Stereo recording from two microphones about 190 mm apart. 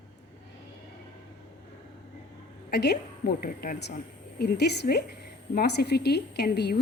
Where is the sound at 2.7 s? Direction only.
60° left (ahead or behind).